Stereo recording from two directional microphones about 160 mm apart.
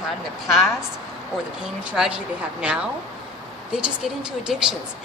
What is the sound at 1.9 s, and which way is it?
Speech, 5° right (ahead or behind).